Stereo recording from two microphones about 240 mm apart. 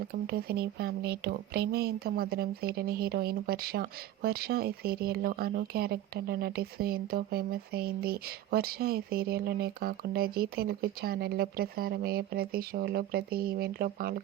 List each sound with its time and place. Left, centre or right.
0.1 s speech: right